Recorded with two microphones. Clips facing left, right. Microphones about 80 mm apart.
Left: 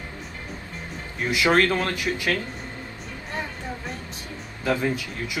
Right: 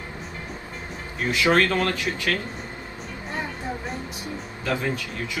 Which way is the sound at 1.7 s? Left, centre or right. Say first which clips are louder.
Right 1 dB; centre.